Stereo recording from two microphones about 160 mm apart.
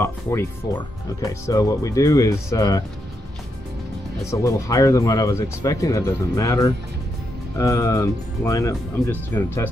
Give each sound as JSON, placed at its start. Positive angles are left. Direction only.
{"t": 0.0, "sound": "speech", "side_deg": 15}
{"t": 4.2, "sound": "speech", "side_deg": 20}